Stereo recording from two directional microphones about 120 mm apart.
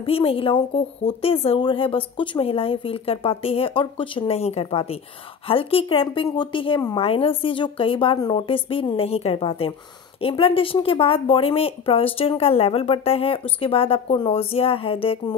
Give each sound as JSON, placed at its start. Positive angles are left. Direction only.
{"t": 0.0, "sound": "a woman's voice", "side_deg": 50}